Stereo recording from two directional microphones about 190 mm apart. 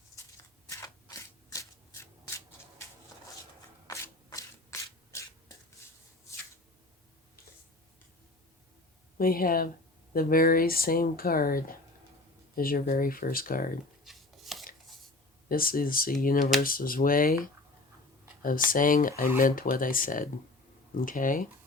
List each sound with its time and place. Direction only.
0.7 s a sound: 15° left (ahead or behind)
3.8 s hands: 15° left (ahead or behind)
9.1 s speech: 50° left (ahead or behind)
14.0 s shuffling cards: centre (ahead or behind)
15.4 s speech: 50° left (ahead or behind)